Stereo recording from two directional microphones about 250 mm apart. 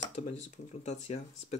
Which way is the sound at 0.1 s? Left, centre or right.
Left.